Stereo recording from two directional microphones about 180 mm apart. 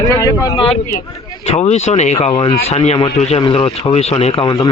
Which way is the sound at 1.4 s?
35° left (ahead or behind).